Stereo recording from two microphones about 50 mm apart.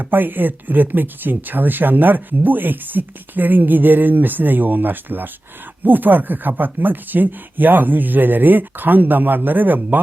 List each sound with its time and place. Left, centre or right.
0.0 s speech: right